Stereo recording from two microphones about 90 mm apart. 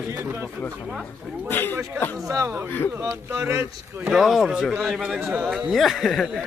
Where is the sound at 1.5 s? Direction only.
25° left (ahead or behind).